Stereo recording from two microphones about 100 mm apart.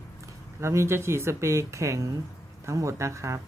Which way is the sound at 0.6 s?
30° right (ahead or behind).